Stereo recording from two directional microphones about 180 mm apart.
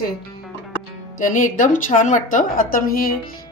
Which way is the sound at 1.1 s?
45° left (ahead or behind).